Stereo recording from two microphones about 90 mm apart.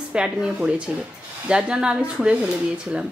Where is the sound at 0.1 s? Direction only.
10° right (ahead or behind).